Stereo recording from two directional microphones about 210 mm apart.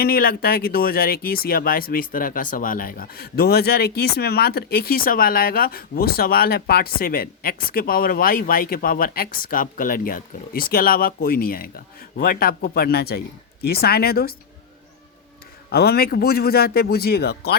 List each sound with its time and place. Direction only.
0.0 s speech: 45° left (ahead or behind)
15.7 s speech: 50° left (ahead or behind)